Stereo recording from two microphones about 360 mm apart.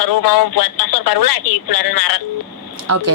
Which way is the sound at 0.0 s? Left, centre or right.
Left.